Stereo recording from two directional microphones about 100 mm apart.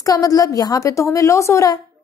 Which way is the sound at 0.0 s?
35° left (ahead or behind).